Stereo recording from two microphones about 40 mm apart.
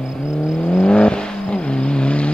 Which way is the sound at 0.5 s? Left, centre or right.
Left.